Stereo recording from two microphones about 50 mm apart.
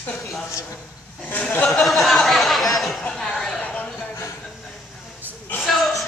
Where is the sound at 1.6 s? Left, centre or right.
Centre.